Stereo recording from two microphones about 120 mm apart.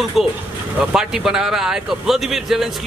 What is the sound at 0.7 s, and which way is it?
Speech, 5° right (ahead or behind).